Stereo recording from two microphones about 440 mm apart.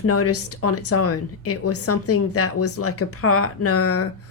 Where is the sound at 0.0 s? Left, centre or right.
Left.